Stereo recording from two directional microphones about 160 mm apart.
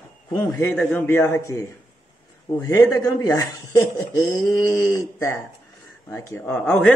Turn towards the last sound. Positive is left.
turn(degrees=5)  # may be behind; listen again after turning